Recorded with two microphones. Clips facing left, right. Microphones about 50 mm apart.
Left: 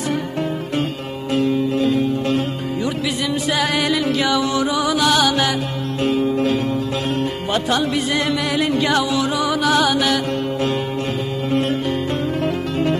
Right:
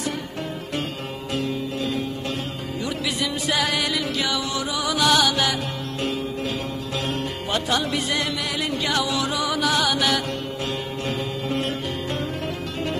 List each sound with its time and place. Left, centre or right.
3.6 s music: left
4.3 s music: left
4.9 s music: centre
7.5 s music: centre
8.5 s music: left
9.4 s music: left
9.9 s music: centre